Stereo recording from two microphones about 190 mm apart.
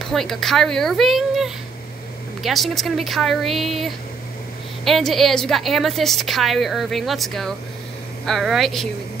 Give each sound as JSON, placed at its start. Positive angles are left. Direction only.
{"t": 0.0, "sound": "a woman's voice", "side_deg": 0}